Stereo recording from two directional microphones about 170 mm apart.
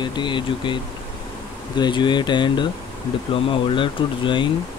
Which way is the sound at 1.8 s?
25° left (ahead or behind).